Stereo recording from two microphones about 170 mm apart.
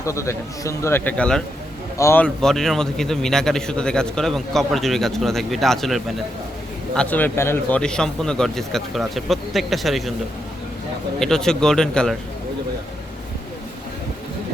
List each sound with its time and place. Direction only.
0.0 s a man's voice: 15° left (ahead or behind); by 10.2 s centre (ahead or behind)
11.2 s a man's voice: 5° left (ahead or behind)